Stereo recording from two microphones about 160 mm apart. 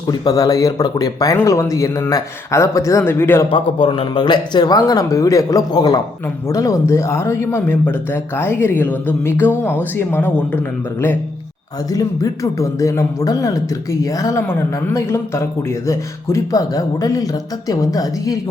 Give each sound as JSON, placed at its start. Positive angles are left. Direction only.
{"t": 0.1, "sound": "speech", "side_deg": 25}
{"t": 3.5, "sound": "speech", "side_deg": 35}
{"t": 11.9, "sound": "speech", "side_deg": 20}